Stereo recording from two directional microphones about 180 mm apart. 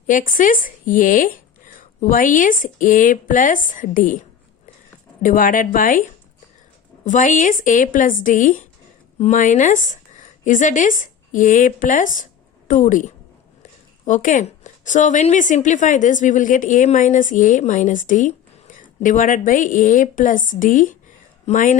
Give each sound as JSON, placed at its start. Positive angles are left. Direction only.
{"t": 0.1, "sound": "a woman's voice", "side_deg": 45}
{"t": 5.2, "sound": "a woman's voice", "side_deg": 50}
{"t": 7.0, "sound": "a woman's voice", "side_deg": 45}